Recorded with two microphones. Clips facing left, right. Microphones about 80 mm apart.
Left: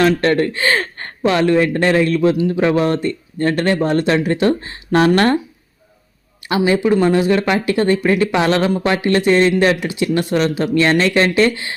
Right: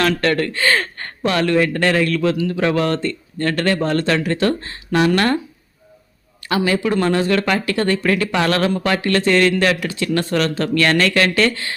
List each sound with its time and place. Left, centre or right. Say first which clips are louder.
0.0 s speech: left 4 dB; left
4.9 s speech: left 3 dB; left
6.4 s speech: left 3 dB; left